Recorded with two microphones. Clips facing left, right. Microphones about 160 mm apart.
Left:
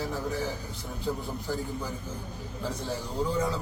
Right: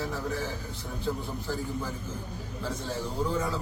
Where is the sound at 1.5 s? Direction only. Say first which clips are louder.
Even; 15° left (ahead or behind).